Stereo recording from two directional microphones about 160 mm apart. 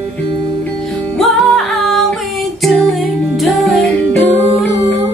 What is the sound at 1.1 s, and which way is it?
Music, centre (ahead or behind).